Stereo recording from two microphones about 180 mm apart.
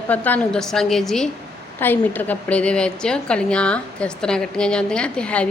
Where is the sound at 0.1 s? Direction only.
10° left (ahead or behind).